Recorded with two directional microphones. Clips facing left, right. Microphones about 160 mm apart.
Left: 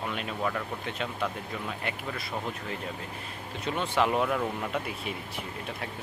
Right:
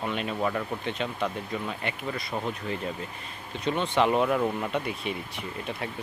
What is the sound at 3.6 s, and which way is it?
Speech, 5° left (ahead or behind).